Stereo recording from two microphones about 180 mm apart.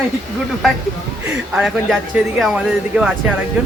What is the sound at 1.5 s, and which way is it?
A man's voice, centre (ahead or behind).